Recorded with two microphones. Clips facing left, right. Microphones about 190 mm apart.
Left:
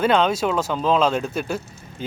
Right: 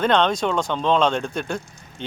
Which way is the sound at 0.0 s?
5° left (ahead or behind).